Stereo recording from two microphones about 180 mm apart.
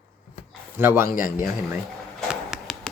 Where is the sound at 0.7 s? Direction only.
15° right (ahead or behind).